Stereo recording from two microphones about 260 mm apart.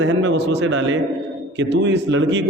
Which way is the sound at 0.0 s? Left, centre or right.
Right.